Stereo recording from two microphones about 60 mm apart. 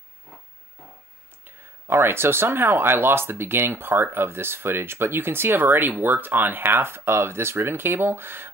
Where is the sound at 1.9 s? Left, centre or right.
Right.